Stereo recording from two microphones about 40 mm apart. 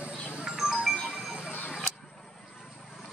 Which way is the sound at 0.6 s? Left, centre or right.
Centre.